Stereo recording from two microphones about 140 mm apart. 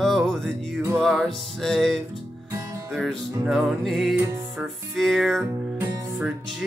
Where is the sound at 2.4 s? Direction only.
20° right (ahead or behind).